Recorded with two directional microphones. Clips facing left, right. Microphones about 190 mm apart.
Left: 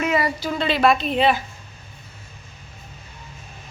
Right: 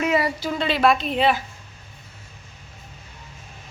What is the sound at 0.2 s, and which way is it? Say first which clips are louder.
Speech: left 1 dB; 25° right (ahead or behind).